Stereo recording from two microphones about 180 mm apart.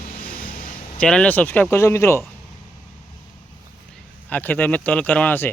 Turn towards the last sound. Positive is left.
turn(degrees=10)  # may be behind; listen again after turning